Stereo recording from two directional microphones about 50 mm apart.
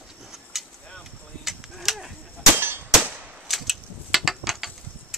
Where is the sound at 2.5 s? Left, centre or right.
Right.